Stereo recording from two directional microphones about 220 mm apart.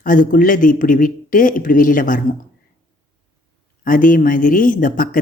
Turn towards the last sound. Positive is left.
turn(degrees=40)  # may be behind; listen again after turning